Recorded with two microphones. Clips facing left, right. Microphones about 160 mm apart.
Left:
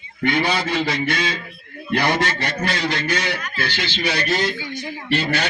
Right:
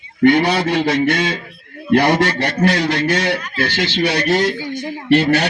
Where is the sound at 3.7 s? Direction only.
70° right (ahead or behind).